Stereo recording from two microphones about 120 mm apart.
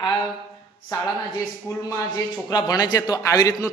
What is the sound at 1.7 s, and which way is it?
A man's voice, 25° left (ahead or behind).